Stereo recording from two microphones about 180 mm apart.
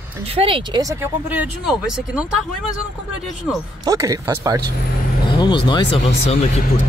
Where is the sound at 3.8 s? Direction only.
20° right (ahead or behind).